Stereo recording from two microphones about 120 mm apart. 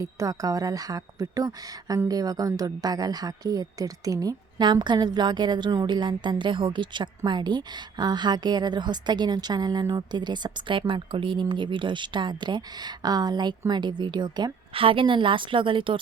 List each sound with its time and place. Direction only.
0.0 s a woman's voice: 30° right (ahead or behind)
14.7 s a woman's voice: 50° right (ahead or behind)